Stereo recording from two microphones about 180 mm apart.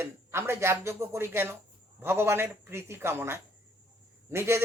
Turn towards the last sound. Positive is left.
turn(degrees=-15)  # may be behind; listen again after turning